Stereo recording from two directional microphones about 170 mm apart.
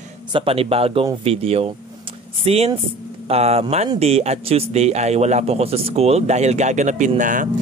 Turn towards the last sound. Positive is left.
turn(degrees=-50)  # may be behind; listen again after turning